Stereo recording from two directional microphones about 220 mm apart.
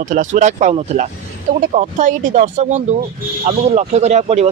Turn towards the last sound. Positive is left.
turn(degrees=-30)  # may be behind; listen again after turning